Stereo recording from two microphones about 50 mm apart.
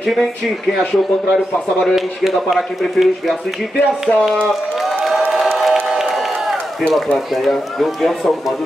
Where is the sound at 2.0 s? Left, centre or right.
Centre.